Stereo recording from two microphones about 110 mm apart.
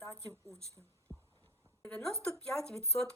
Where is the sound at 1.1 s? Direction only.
25° right (ahead or behind).